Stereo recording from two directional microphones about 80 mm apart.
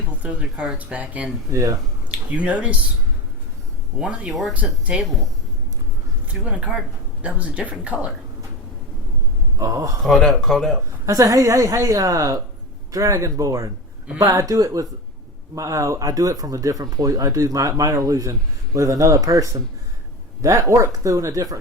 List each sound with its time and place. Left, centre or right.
0.1 s speech: centre
1.5 s speech: right
2.0 s speech: centre
3.9 s speech: centre
4.3 s speech: centre
6.2 s speech: centre
9.6 s speech: right
10.0 s speech: centre
11.0 s speech: right